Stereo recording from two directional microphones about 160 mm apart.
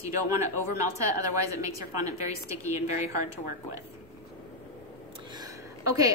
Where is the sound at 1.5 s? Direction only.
20° right (ahead or behind).